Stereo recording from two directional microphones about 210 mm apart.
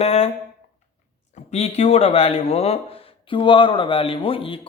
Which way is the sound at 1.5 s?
30° left (ahead or behind).